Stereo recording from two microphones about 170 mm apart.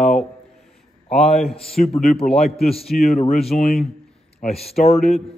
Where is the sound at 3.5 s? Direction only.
50° left (ahead or behind).